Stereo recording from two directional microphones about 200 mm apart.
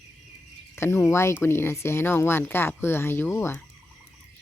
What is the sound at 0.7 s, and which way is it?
A woman's voice, 10° left (ahead or behind).